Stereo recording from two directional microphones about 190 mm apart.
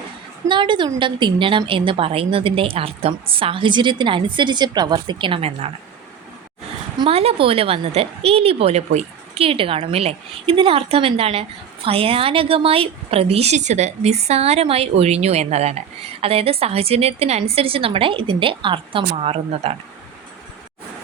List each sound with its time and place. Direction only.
0.4 s a woman's voice: 25° right (ahead or behind)
7.0 s a woman's voice: 30° right (ahead or behind)